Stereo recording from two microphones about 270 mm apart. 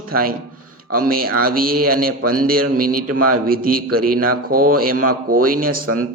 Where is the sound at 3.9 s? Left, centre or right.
Right.